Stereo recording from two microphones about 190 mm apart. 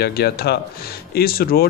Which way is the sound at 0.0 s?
55° left (ahead or behind).